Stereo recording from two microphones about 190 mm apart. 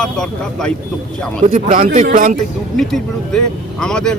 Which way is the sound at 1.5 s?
40° right (ahead or behind).